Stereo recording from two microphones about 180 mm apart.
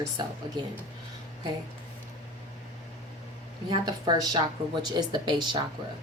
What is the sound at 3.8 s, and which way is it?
Speech, 25° right (ahead or behind).